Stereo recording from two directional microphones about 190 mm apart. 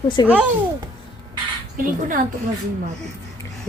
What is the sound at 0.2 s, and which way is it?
Speech, 20° left (ahead or behind).